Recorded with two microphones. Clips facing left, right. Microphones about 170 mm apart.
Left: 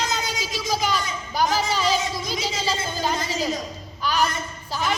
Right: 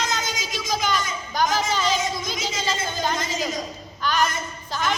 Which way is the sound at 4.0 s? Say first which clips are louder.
Even; 5° left (ahead or behind).